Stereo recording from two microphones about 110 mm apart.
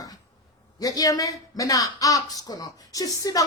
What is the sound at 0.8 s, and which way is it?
Speech, 35° left (ahead or behind).